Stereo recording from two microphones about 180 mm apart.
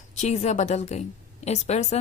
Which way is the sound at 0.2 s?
40° left (ahead or behind).